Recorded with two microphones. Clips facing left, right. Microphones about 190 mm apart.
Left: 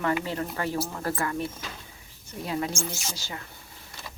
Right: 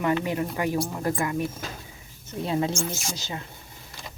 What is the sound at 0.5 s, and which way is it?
Speech, 15° right (ahead or behind).